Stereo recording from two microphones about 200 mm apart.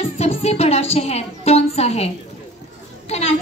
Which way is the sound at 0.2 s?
30° left (ahead or behind).